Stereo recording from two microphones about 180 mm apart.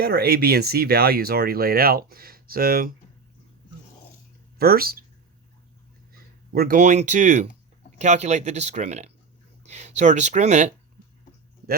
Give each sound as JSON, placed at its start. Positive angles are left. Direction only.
{"t": 0.0, "sound": "speech", "side_deg": -60}
{"t": 4.5, "sound": "speech", "side_deg": -55}
{"t": 6.5, "sound": "speech", "side_deg": -55}